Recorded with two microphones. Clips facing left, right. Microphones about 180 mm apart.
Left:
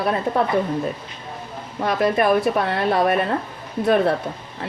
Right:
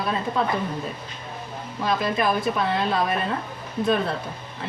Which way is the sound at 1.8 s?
60° left (ahead or behind).